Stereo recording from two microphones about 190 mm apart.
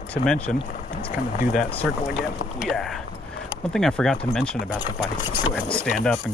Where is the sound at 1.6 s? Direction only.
5° left (ahead or behind).